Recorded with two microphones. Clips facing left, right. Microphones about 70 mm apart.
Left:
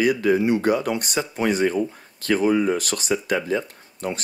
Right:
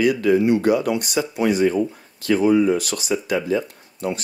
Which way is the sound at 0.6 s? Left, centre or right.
Left.